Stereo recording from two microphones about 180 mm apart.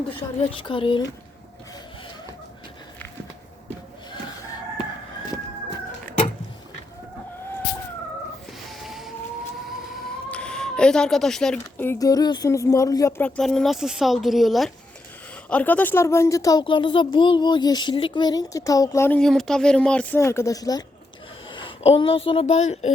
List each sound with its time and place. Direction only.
0.5 s speech: 30° left (ahead or behind)
8.8 s a sound: centre (ahead or behind)
9.9 s speech: 5° left (ahead or behind); by 22.9 s 40° left (ahead or behind)